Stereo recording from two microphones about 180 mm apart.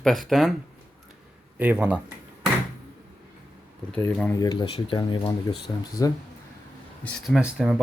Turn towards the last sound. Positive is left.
turn(degrees=-5)  # may be behind; listen again after turning